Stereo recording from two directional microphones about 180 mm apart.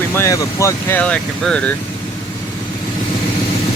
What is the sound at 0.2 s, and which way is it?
Speech, 15° left (ahead or behind).